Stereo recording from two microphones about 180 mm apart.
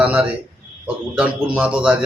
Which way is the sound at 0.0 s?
5° right (ahead or behind).